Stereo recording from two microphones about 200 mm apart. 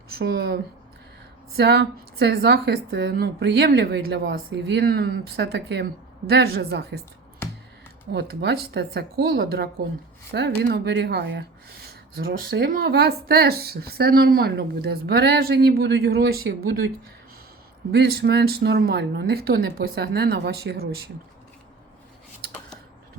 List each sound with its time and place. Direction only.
0.2 s speech: 50° right (ahead or behind)
8.1 s speech: 60° right (ahead or behind)
17.9 s speech: 55° right (ahead or behind)